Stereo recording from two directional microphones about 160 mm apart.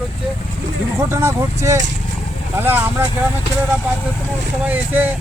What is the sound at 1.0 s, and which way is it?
Speech, 15° right (ahead or behind).